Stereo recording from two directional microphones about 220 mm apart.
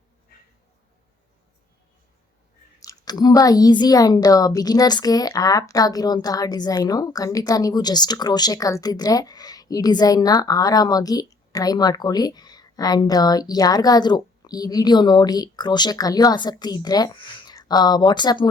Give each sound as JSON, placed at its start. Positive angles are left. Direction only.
{"t": 2.8, "sound": "a woman's voice", "side_deg": 15}